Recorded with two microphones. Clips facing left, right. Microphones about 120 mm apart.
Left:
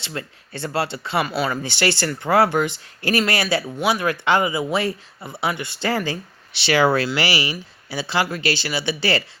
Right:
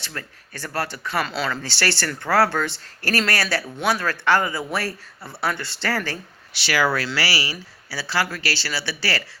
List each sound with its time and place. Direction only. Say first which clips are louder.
0.0 s speech: left 4 dB; 20° left (ahead or behind)
1.2 s speech: left 3 dB; 10° left (ahead or behind)